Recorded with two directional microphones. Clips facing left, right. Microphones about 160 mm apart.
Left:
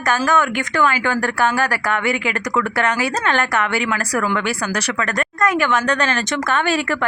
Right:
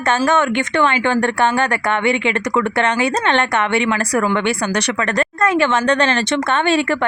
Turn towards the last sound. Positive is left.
turn(degrees=-25)  # may be behind; listen again after turning